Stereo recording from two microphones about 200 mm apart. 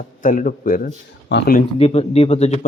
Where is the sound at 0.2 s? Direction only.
40° left (ahead or behind).